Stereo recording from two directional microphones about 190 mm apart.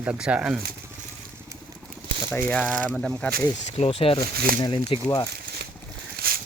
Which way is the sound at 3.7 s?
30° left (ahead or behind).